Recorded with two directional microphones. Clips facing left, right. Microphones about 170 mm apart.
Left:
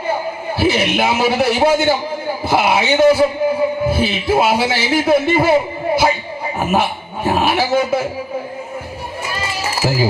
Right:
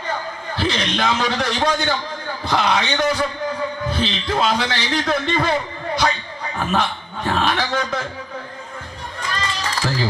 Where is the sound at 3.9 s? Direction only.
10° left (ahead or behind).